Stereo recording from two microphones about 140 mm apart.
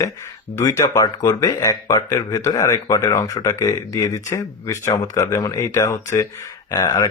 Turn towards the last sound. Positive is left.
turn(degrees=25)  # may be behind; listen again after turning